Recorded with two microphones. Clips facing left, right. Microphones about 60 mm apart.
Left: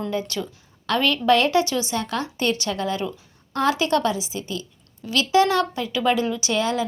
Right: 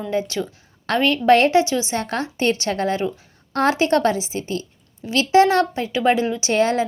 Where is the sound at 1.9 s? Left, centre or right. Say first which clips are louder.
Right 2 dB; right.